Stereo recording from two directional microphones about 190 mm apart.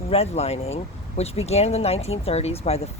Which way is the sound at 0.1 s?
35° left (ahead or behind).